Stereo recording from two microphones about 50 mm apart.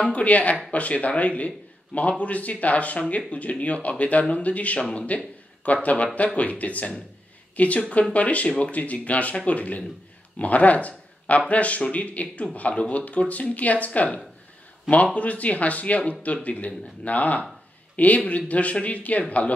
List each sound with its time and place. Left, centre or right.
0.0 s a man's voice: left